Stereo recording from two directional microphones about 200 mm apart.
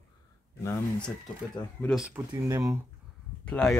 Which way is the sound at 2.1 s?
15° right (ahead or behind).